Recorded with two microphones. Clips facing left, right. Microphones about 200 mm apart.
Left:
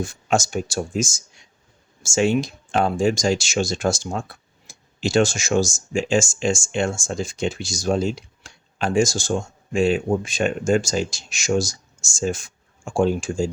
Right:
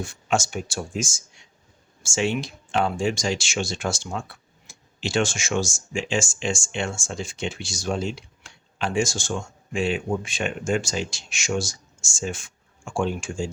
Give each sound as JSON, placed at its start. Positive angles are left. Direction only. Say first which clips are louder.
{"t": 0.0, "sound": "speech", "louder": "left 3 dB", "side_deg": 40}